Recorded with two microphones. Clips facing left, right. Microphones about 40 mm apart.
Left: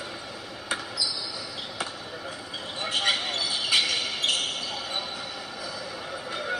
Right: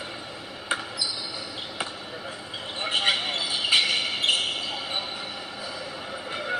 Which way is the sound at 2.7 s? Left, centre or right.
Right.